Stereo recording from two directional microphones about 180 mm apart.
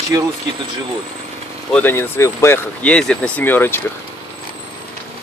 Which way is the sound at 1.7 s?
10° left (ahead or behind).